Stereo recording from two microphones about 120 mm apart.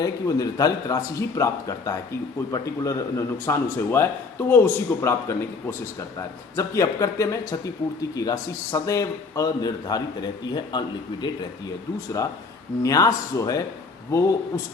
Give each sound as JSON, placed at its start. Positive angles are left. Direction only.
{"t": 0.0, "sound": "a man's voice", "side_deg": 30}
{"t": 12.8, "sound": "speech", "side_deg": 30}